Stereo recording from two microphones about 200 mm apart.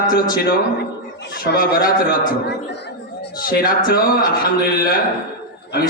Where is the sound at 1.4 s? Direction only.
45° left (ahead or behind).